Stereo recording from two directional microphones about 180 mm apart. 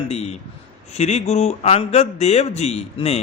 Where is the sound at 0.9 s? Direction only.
40° left (ahead or behind).